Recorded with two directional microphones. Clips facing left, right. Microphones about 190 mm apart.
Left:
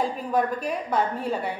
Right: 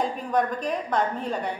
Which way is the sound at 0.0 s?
5° left (ahead or behind).